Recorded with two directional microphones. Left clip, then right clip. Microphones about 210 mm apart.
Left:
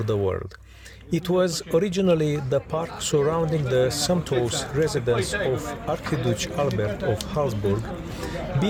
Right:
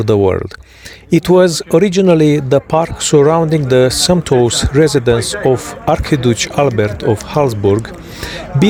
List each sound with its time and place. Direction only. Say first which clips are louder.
0.0 s speech: right 13 dB; 40° right (ahead or behind)